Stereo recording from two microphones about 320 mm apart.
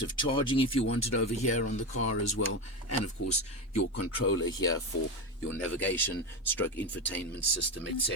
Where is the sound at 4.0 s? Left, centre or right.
Left.